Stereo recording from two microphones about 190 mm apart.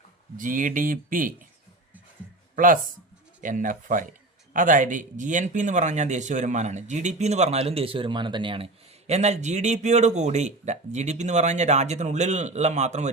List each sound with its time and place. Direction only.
0.3 s speech: 45° right (ahead or behind)
3.4 s speech: 45° right (ahead or behind)